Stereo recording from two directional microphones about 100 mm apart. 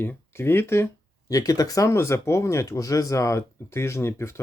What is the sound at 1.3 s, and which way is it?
Speech, 35° left (ahead or behind).